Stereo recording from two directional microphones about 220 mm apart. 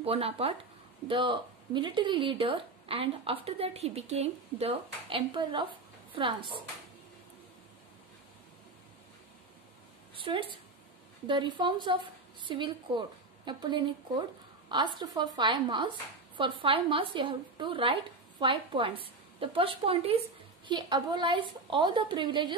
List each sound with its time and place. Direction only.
0.0 s speech: 25° right (ahead or behind)
10.1 s a woman's voice: 25° right (ahead or behind)